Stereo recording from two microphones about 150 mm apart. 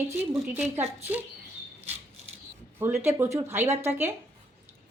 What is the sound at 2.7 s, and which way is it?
Speech, 15° right (ahead or behind).